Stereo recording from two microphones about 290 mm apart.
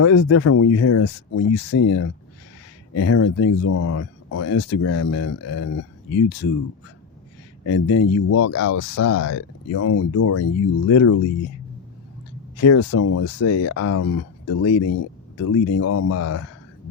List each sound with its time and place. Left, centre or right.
0.0 s speech: left
7.6 s speech: left
12.5 s speech: left